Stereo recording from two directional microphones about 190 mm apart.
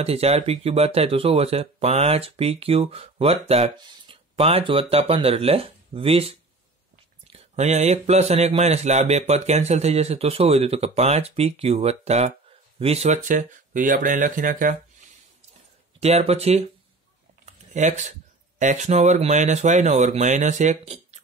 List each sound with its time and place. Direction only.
0.0 s speech: 35° right (ahead or behind)
7.3 s speech: 35° right (ahead or behind)
16.0 s speech: 35° right (ahead or behind)
17.5 s a sound: 40° right (ahead or behind)
18.6 s speech: 40° right (ahead or behind)